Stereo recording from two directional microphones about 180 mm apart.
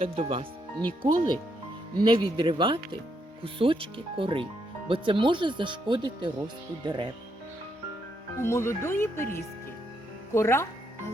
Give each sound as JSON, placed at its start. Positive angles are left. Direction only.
{"t": 0.0, "sound": "speech", "side_deg": -35}
{"t": 8.4, "sound": "speech", "side_deg": 15}
{"t": 10.3, "sound": "speech", "side_deg": 15}